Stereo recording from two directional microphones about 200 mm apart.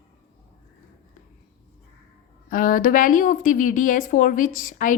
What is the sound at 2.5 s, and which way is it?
Speech, 45° left (ahead or behind).